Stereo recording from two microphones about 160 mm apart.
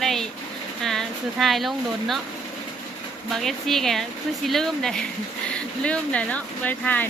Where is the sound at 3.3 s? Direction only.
Centre (ahead or behind).